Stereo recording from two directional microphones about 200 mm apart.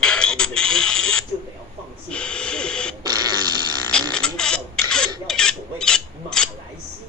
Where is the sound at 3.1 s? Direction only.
20° right (ahead or behind).